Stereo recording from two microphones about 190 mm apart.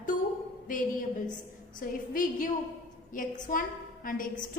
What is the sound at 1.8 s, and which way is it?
A woman's voice, 45° left (ahead or behind).